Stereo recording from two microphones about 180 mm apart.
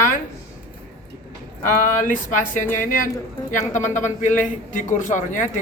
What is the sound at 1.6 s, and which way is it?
Speech, 45° left (ahead or behind).